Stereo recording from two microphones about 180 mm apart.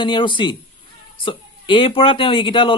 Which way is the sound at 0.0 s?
25° left (ahead or behind).